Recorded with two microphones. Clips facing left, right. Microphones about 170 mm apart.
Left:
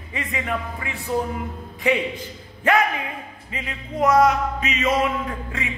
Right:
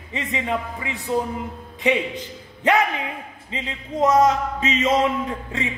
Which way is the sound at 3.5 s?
25° right (ahead or behind).